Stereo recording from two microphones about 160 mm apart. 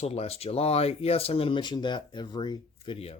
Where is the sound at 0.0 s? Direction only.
40° left (ahead or behind).